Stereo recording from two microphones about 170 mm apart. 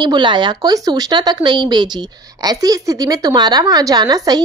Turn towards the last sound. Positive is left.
turn(degrees=-25)  # may be behind; listen again after turning